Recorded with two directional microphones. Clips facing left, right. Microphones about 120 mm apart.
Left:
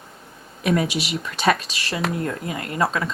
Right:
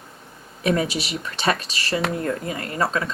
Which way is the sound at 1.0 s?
Centre (ahead or behind).